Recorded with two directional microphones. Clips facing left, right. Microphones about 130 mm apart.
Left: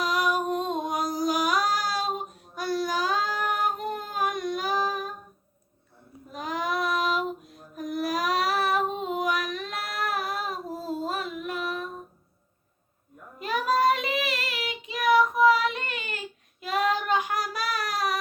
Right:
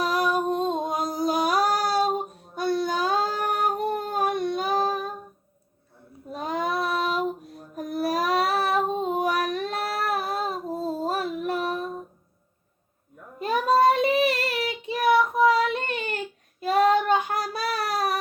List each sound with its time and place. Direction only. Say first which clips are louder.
0.0 s music: right 2 dB; 30° right (ahead or behind)
6.3 s child singing: right 2 dB; 30° right (ahead or behind)
13.4 s child singing: right 4 dB; 30° right (ahead or behind)